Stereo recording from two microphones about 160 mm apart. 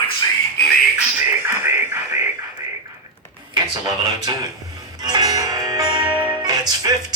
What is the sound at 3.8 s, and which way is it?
Music, 20° right (ahead or behind).